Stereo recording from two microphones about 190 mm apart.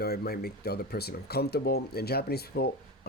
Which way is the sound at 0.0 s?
55° left (ahead or behind).